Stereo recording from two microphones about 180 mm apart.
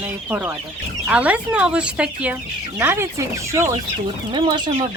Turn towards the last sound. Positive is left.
turn(degrees=-25)  # may be behind; listen again after turning